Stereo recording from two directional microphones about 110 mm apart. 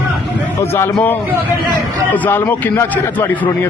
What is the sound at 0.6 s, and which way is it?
Speech, 25° left (ahead or behind).